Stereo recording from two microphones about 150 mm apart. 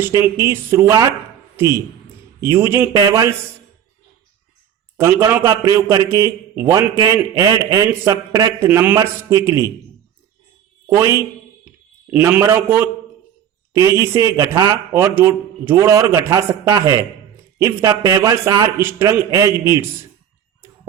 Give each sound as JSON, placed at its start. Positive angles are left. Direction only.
{"t": 0.0, "sound": "a man's voice", "side_deg": -15}
{"t": 4.9, "sound": "a man's voice", "side_deg": -15}
{"t": 10.9, "sound": "a man's voice", "side_deg": -20}